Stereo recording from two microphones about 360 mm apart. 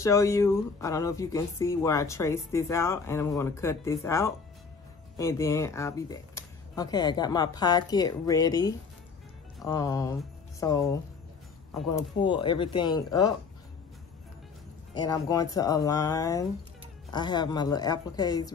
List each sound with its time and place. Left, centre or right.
0.0 s speech: centre
15.0 s speech: centre